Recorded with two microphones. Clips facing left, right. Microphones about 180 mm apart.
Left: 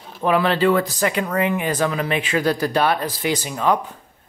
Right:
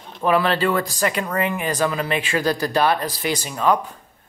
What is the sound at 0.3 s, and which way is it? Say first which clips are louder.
Speech: left 2 dB; 15° left (ahead or behind).